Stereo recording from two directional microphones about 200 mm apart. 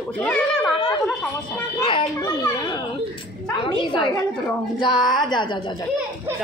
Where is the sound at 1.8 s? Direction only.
25° left (ahead or behind).